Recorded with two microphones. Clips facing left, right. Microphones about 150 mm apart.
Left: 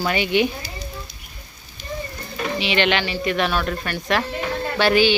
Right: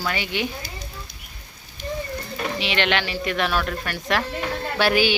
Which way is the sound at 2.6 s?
Centre (ahead or behind).